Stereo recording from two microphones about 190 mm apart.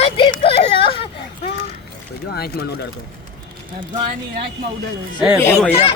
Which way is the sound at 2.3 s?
55° left (ahead or behind).